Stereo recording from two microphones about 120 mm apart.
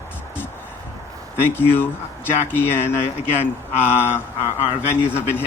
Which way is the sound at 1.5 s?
20° left (ahead or behind).